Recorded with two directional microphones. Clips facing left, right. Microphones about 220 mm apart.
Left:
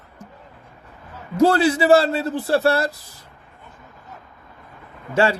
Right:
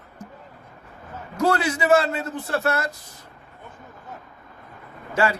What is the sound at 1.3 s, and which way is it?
Speech, 30° left (ahead or behind).